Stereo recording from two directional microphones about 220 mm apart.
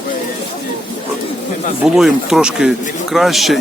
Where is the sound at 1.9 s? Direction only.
Centre (ahead or behind).